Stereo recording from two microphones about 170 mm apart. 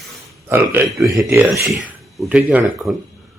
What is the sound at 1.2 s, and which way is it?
Speech, 15° right (ahead or behind).